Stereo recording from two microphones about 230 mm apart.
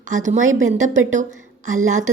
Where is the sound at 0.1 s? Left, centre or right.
Right.